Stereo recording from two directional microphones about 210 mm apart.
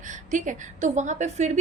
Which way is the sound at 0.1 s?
35° right (ahead or behind).